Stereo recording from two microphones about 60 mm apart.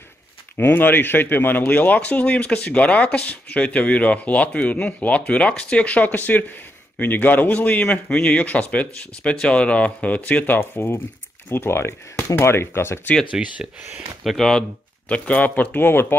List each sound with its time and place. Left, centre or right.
0.6 s speech: left
13.3 s speech: centre
14.2 s speech: centre
15.0 s speech: left